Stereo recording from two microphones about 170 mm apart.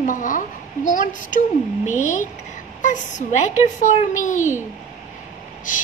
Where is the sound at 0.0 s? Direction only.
50° left (ahead or behind).